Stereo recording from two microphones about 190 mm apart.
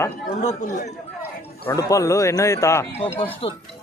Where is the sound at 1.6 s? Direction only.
15° left (ahead or behind).